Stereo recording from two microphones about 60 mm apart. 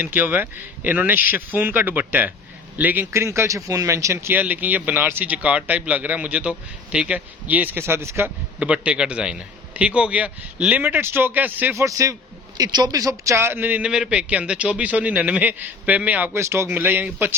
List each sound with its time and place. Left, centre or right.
0.0 s speech: right
3.1 s speech: right
3.7 s speech: right
4.3 s a man's voice: right
5.3 s a man's voice: right
7.8 s speech: right
8.5 s a man's voice: centre
10.8 s speech: right
11.8 s speech: right
12.5 s a woman's voice: right
13.3 s speech: right
13.8 s a man's voice: centre
16.3 s speech: right
16.6 s speech: right